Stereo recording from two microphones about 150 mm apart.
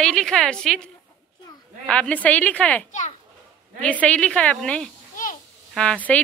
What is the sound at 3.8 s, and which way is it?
A woman's voice, 10° left (ahead or behind).